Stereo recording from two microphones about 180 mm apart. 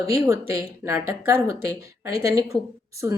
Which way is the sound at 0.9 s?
10° right (ahead or behind).